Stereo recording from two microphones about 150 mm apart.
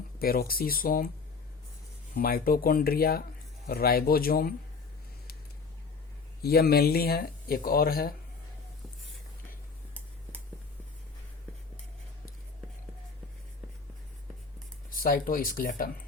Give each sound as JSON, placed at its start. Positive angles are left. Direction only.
{"t": 0.2, "sound": "speech", "side_deg": 80}
{"t": 2.1, "sound": "speech", "side_deg": 80}
{"t": 6.4, "sound": "speech", "side_deg": 90}
{"t": 14.8, "sound": "speech", "side_deg": 70}